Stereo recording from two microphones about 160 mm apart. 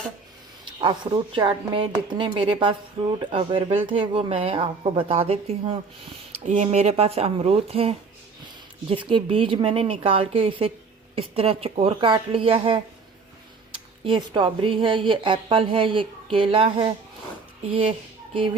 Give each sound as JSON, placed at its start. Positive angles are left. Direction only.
{"t": 0.6, "sound": "speech", "side_deg": -30}
{"t": 6.4, "sound": "speech", "side_deg": -50}